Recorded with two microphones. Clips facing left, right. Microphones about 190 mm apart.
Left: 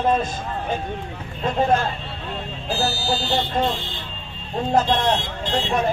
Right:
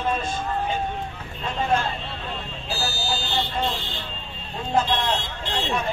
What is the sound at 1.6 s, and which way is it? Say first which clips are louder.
Speech: left 4 dB; 40° left (ahead or behind).